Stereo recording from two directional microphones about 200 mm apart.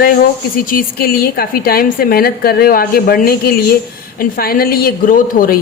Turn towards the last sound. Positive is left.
turn(degrees=45)  # may be behind; listen again after turning